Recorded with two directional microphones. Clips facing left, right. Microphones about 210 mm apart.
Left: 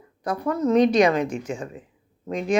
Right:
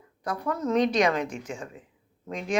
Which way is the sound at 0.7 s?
5° left (ahead or behind).